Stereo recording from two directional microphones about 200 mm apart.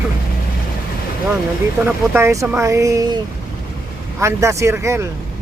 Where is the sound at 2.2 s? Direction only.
10° right (ahead or behind).